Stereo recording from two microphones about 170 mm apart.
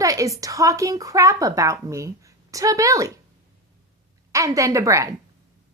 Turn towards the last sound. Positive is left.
turn(degrees=-20)  # may be behind; listen again after turning